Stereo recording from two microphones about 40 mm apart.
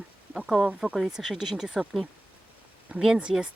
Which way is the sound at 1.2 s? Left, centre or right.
Centre.